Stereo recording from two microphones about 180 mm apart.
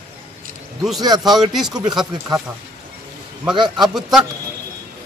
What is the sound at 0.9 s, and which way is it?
Speech, 20° right (ahead or behind).